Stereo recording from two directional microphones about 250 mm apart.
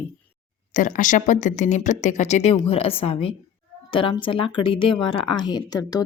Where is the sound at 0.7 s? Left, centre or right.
Left.